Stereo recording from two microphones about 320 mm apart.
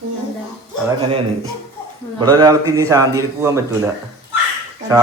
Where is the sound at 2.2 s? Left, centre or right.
Centre.